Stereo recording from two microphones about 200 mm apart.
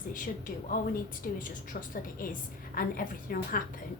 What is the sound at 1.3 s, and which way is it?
A woman's voice, 45° left (ahead or behind).